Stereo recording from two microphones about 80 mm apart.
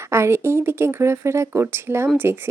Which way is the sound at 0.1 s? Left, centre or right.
Right.